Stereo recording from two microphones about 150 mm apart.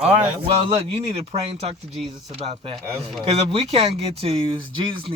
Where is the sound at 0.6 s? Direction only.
40° right (ahead or behind).